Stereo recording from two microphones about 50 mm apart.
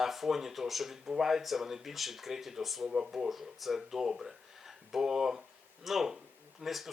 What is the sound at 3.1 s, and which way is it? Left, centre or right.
Speech, centre.